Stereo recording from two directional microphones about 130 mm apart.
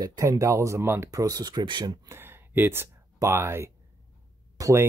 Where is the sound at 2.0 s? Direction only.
20° right (ahead or behind).